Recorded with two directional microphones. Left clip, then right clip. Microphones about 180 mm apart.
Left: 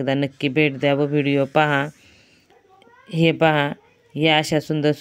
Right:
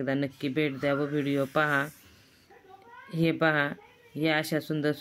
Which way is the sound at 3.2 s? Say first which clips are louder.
Left 8 dB; 35° left (ahead or behind).